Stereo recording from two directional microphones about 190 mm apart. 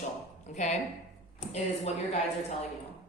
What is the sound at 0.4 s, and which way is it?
Speech, 40° left (ahead or behind).